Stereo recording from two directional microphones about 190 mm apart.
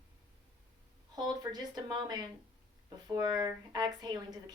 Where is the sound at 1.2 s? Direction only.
20° right (ahead or behind).